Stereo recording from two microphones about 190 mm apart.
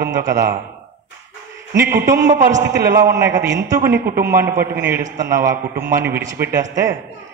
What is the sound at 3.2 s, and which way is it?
Speech, 15° right (ahead or behind).